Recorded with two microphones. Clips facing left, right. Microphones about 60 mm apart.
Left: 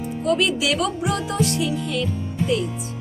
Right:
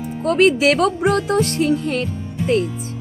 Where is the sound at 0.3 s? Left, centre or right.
Right.